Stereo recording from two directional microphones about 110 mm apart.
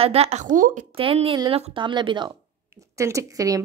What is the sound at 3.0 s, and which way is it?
Speech, 30° right (ahead or behind).